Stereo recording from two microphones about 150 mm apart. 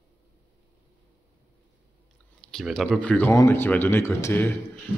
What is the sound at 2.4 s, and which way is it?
Speech, 5° left (ahead or behind).